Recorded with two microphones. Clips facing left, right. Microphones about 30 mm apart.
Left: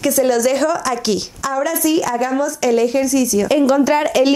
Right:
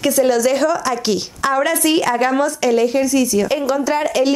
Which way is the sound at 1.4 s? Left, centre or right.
Right.